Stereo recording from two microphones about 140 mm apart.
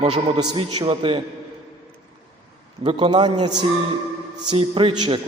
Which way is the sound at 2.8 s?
35° right (ahead or behind).